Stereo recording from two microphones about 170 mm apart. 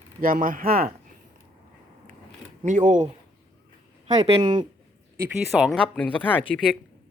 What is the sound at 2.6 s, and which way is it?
Speech, 50° right (ahead or behind).